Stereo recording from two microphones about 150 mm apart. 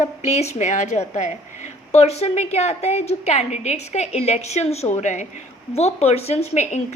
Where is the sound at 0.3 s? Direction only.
45° left (ahead or behind).